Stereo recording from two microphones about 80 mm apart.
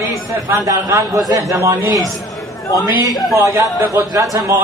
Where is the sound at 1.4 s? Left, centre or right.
Right.